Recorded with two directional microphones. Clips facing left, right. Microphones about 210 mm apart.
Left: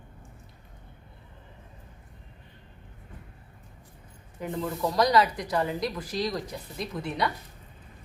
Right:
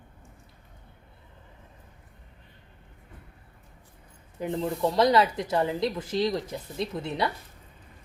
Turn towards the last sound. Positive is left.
turn(degrees=-25)  # may be behind; listen again after turning